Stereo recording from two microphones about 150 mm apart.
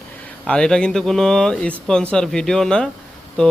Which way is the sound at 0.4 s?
5° left (ahead or behind).